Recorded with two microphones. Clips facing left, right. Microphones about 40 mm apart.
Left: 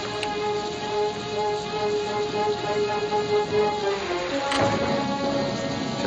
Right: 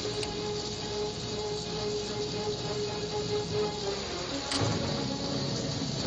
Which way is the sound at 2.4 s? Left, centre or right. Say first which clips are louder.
Left 9 dB; left.